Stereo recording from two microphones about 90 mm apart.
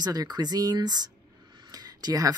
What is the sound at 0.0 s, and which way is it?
Speech, 45° right (ahead or behind).